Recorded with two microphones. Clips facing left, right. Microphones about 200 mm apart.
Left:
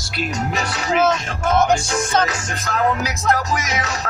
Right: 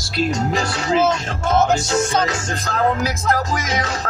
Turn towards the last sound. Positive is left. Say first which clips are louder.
# even
turn(degrees=-30)  # may be behind; listen again after turning